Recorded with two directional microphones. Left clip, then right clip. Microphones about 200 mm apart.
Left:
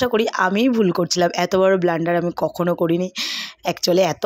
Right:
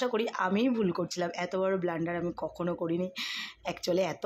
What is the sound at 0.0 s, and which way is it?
Speech, 35° left (ahead or behind).